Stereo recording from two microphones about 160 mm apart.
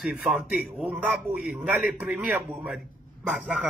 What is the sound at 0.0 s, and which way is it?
A man's voice, 5° right (ahead or behind).